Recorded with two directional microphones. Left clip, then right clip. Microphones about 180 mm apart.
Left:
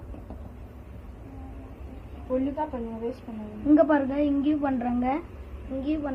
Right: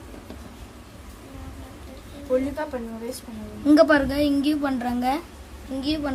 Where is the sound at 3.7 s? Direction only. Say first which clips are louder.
Right 4 dB; 40° right (ahead or behind).